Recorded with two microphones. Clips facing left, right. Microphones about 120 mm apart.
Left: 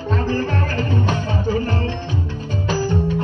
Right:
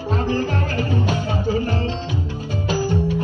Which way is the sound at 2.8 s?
15° right (ahead or behind).